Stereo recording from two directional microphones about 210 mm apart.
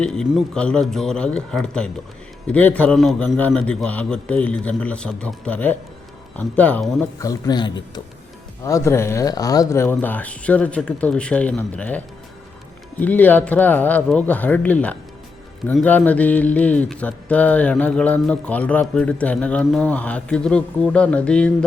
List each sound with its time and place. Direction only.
0.0 s a man's voice: 5° left (ahead or behind)
7.2 s speech: 15° left (ahead or behind)